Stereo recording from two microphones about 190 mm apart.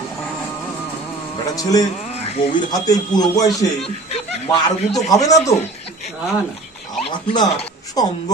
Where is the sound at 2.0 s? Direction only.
35° left (ahead or behind).